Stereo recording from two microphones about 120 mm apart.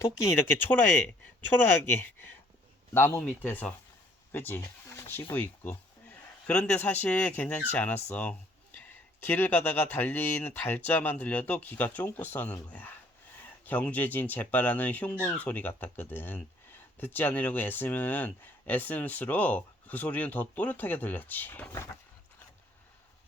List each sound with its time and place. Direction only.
0.4 s speech: 15° left (ahead or behind)